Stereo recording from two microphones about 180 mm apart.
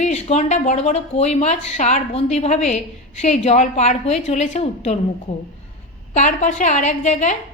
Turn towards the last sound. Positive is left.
turn(degrees=40)  # may be behind; listen again after turning